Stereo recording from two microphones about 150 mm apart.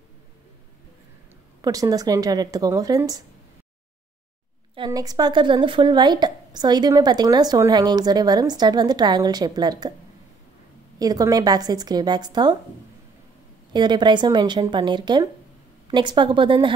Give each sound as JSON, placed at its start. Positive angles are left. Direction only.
{"t": 1.6, "sound": "speech", "side_deg": -25}
{"t": 4.7, "sound": "speech", "side_deg": -25}
{"t": 11.0, "sound": "speech", "side_deg": -25}
{"t": 13.7, "sound": "a woman's voice", "side_deg": -30}